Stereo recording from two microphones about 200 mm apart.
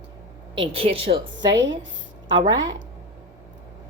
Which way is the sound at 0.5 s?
30° right (ahead or behind).